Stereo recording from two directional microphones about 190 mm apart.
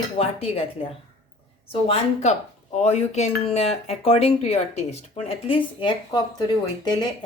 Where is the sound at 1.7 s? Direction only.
30° left (ahead or behind).